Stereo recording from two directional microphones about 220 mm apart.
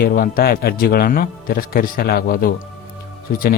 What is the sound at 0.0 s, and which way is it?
A man's voice, 40° left (ahead or behind).